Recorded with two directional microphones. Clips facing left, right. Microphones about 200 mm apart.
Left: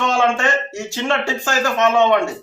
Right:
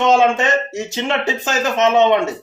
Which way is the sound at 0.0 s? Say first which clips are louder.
Right 4 dB; 20° right (ahead or behind).